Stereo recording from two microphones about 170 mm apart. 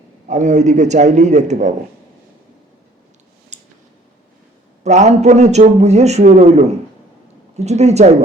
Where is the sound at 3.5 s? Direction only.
45° right (ahead or behind).